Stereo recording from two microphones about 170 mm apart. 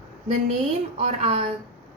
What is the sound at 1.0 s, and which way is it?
Speech, 35° right (ahead or behind).